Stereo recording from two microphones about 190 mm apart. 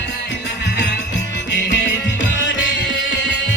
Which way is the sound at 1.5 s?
65° left (ahead or behind).